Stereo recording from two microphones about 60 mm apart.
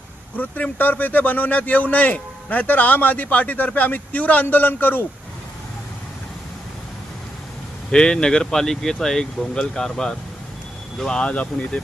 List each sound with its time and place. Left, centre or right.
0.3 s speech: left
7.9 s speech: centre